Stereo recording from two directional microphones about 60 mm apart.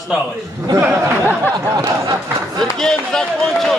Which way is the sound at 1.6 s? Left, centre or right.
Right.